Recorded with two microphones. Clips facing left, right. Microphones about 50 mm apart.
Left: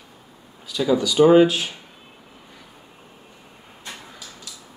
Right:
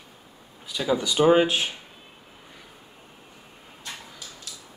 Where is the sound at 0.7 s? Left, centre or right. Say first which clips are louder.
Left 5 dB; centre.